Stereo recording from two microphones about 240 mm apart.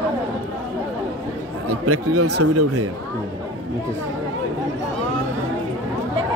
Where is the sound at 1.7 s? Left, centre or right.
Right.